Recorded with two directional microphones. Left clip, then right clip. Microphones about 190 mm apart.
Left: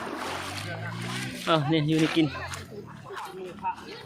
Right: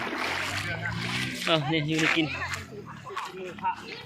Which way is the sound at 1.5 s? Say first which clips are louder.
Left 2 dB; 20° left (ahead or behind).